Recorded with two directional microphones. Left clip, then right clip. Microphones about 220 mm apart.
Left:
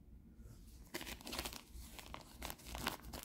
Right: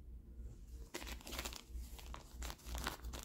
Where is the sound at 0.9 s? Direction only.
10° left (ahead or behind).